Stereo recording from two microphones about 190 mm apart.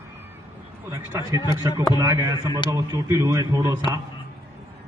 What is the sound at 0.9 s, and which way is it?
A man's voice, 15° right (ahead or behind).